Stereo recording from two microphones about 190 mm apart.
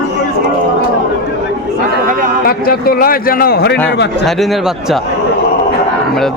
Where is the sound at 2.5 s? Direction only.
50° left (ahead or behind).